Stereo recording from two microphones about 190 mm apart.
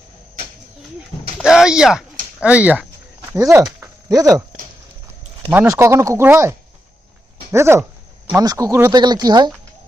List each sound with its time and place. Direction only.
1.4 s speech: 5° right (ahead or behind)
5.5 s speech: 15° right (ahead or behind)